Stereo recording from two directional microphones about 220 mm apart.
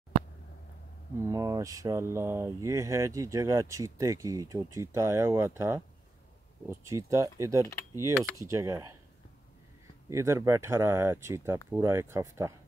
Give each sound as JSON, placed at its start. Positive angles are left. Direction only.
{"t": 1.3, "sound": "speech", "side_deg": -15}
{"t": 7.6, "sound": "speech", "side_deg": 15}
{"t": 8.4, "sound": "speech", "side_deg": -15}
{"t": 10.0, "sound": "speech", "side_deg": -15}